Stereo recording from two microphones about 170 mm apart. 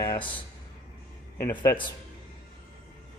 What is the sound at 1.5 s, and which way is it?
Speech, 20° left (ahead or behind).